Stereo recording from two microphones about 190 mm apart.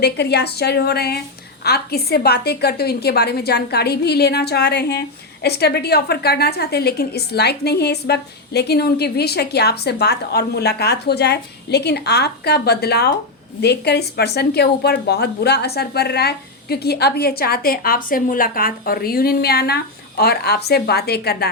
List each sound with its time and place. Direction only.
0.0 s a woman's voice: 60° left (ahead or behind)